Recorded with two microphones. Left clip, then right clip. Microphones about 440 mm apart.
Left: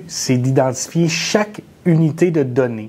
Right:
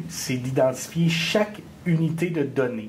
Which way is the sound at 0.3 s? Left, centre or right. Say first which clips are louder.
Left 5 dB; left.